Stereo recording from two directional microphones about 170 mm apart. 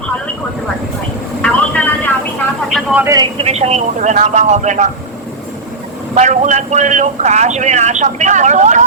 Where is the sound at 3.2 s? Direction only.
35° right (ahead or behind).